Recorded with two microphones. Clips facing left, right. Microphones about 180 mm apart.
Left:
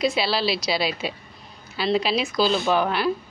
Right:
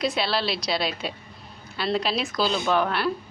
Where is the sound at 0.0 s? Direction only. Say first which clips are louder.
Left 3 dB; centre (ahead or behind).